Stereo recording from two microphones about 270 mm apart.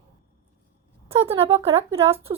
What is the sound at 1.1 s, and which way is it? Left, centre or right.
Speech, right.